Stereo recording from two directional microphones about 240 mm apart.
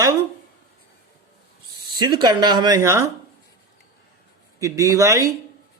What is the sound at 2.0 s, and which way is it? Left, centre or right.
Speech, centre.